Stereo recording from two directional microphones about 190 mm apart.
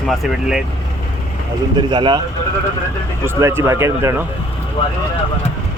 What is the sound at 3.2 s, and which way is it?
Speech, 15° right (ahead or behind).